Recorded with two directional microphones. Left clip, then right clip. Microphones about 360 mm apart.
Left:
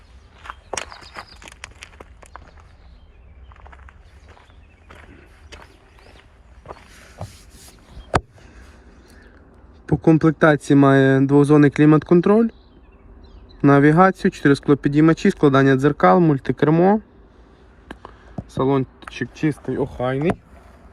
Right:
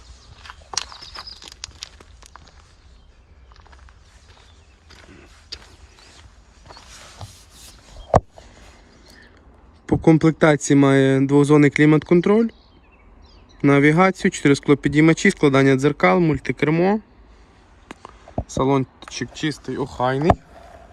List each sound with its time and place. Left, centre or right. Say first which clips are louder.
0.4 s walk: even; centre
3.5 s a sound: left 4 dB; centre
9.8 s speech: even; centre
13.7 s speech: left 2 dB; centre
18.5 s speech: even; centre
20.0 s speech: right 5 dB; right